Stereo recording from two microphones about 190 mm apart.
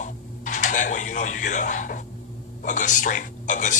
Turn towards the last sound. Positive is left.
turn(degrees=40)  # may be behind; listen again after turning